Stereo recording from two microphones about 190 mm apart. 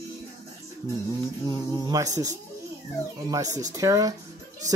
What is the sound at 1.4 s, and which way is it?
Speech, 20° right (ahead or behind).